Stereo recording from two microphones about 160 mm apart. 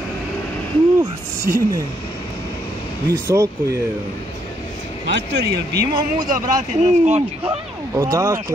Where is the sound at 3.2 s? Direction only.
20° right (ahead or behind).